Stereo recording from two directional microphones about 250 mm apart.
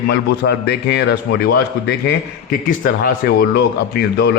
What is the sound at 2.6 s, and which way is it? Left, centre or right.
Speech, left.